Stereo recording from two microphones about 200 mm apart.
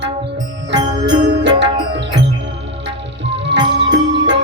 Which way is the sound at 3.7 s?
65° right (ahead or behind).